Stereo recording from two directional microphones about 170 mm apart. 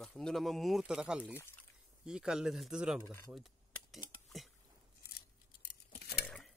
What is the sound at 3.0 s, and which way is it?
Speech, 15° left (ahead or behind).